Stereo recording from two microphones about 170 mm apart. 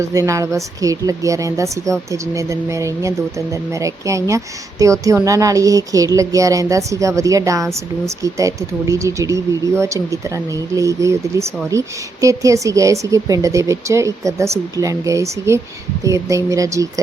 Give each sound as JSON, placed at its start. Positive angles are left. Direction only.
{"t": 0.0, "sound": "a woman's voice", "side_deg": -20}